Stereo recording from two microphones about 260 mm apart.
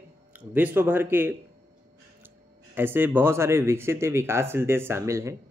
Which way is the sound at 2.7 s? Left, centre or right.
Centre.